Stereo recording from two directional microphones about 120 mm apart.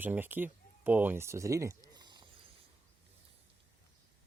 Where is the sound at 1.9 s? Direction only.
35° right (ahead or behind).